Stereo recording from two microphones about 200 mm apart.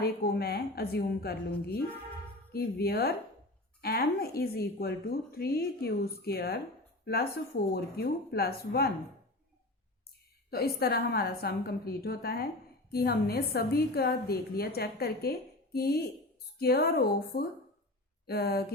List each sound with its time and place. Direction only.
0.0 s a woman's voice: 50° left (ahead or behind)
10.5 s a woman's voice: 50° left (ahead or behind)